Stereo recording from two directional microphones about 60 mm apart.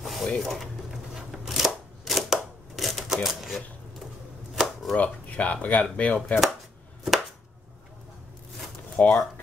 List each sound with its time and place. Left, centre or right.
0.0 s mechanisms: centre
0.4 s speech: centre
1.1 s chopping: centre
4.9 s speech: left
9.0 s speech: left